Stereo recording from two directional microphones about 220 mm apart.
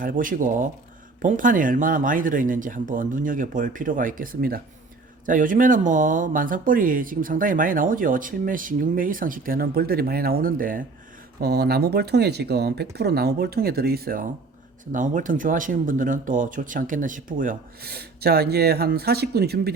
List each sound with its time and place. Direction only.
0.0 s speech: 40° right (ahead or behind)